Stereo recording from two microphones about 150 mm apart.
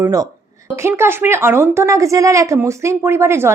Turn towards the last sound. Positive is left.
turn(degrees=-20)  # may be behind; listen again after turning